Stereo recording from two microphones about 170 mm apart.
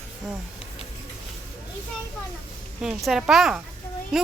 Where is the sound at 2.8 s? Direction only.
5° right (ahead or behind).